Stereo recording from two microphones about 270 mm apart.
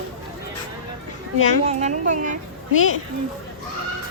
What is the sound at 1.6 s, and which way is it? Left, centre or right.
Speech, right.